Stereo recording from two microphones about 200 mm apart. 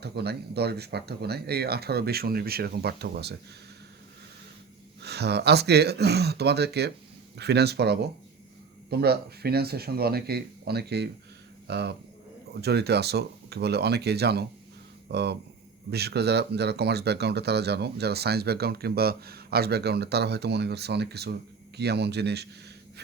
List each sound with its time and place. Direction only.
0.0 s speech: 55° right (ahead or behind)
5.0 s speech: 55° right (ahead or behind)